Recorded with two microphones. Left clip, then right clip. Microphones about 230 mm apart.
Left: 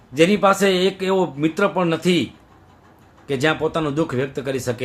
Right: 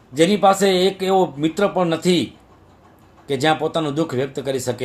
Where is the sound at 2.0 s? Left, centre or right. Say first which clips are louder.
Right 1 dB; left.